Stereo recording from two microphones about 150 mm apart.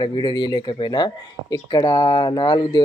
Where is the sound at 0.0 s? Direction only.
30° left (ahead or behind).